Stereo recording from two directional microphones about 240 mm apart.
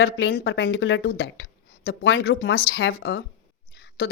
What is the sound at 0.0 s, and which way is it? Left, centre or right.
Speech, left.